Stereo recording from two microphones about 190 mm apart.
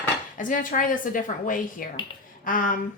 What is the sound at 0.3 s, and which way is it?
A woman's voice, 45° left (ahead or behind).